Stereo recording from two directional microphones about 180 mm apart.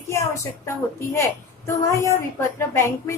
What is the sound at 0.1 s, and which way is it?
A woman's voice, 15° left (ahead or behind).